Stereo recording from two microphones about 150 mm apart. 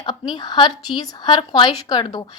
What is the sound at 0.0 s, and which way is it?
Speech, 30° left (ahead or behind).